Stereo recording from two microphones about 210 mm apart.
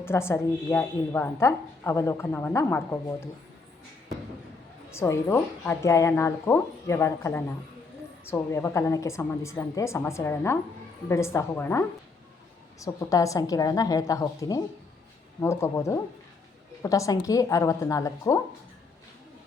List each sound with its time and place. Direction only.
0.0 s a woman's voice: 10° left (ahead or behind)
4.9 s a woman's voice: 15° left (ahead or behind)